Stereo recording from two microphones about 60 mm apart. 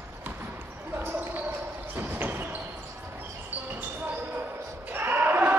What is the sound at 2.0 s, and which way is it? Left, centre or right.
Basketball bounce, right.